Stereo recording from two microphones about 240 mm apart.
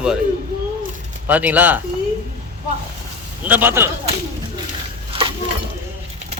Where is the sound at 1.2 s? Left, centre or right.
Centre.